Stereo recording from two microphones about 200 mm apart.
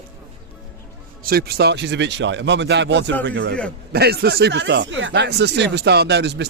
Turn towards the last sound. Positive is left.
turn(degrees=-60)  # may be behind; listen again after turning